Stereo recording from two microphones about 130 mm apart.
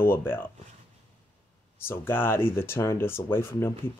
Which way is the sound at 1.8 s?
15° left (ahead or behind).